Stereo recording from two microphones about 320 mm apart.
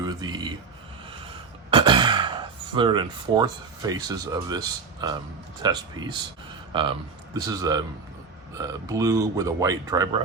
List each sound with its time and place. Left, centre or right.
0.0 s a sound: centre
1.7 s gasp: centre
2.7 s speech: centre